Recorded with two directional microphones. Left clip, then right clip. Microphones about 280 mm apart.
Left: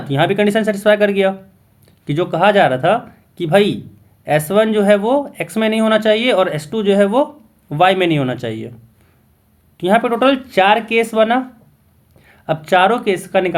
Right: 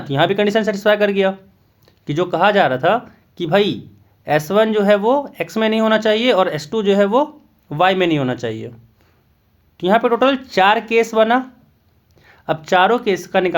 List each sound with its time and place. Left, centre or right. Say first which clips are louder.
0.0 s speech: left 1 dB; right
9.7 s speech: even; right